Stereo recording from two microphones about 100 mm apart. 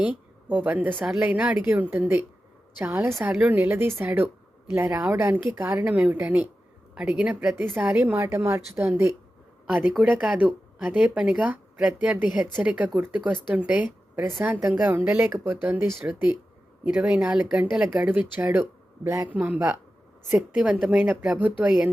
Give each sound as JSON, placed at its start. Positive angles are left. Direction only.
{"t": 0.0, "sound": "a woman's voice", "side_deg": -15}
{"t": 19.4, "sound": "speech", "side_deg": -15}